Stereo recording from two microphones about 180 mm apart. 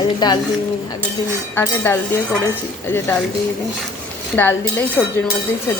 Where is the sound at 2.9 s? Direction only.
10° left (ahead or behind).